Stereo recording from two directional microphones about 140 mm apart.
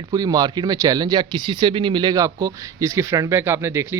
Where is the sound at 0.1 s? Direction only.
30° right (ahead or behind).